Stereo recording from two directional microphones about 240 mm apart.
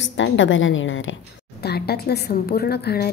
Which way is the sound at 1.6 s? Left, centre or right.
Left.